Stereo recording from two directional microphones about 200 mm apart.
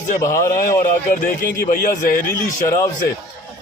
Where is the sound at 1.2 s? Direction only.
40° left (ahead or behind).